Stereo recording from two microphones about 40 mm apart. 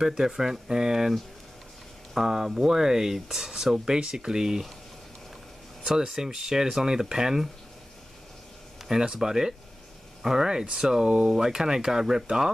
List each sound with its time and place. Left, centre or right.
0.0 s speech: centre
2.1 s speech: centre
5.9 s speech: centre
8.9 s speech: centre